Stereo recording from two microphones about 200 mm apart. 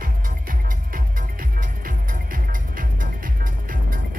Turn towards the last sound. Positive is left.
turn(degrees=-45)  # may be behind; listen again after turning